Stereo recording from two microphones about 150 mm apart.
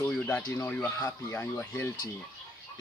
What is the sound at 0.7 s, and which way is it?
Speech, 10° left (ahead or behind).